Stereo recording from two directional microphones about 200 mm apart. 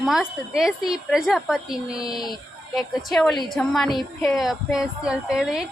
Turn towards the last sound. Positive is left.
turn(degrees=-5)  # may be behind; listen again after turning